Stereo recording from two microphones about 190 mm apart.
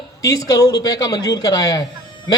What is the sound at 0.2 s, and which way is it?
A man's voice, 15° left (ahead or behind).